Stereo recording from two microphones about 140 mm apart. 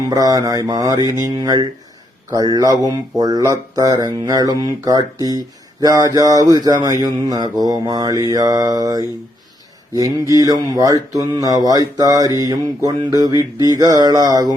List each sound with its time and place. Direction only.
0.1 s speech: 25° right (ahead or behind)